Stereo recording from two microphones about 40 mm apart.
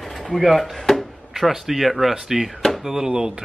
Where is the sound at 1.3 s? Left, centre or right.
Centre.